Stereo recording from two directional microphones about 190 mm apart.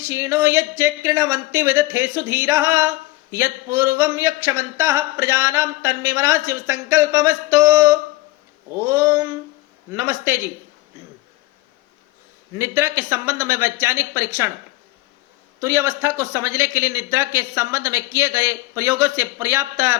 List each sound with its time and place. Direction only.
0.1 s speech: 15° right (ahead or behind)
12.5 s speech: 15° right (ahead or behind)
15.6 s speech: 15° right (ahead or behind)